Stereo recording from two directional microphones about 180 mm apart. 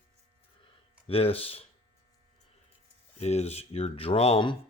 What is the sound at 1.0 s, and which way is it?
Speech, 30° left (ahead or behind).